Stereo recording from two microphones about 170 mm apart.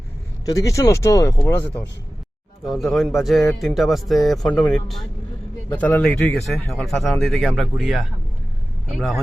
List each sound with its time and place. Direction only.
0.4 s speech: 20° left (ahead or behind)
2.6 s speech: centre (ahead or behind)